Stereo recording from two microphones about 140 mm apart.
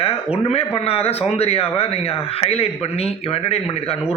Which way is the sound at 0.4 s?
45° left (ahead or behind).